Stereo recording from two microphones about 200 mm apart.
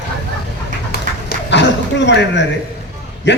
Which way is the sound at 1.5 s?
60° left (ahead or behind).